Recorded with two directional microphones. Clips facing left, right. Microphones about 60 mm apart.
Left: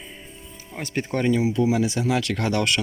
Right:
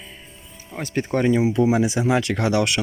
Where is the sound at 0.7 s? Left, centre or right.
Centre.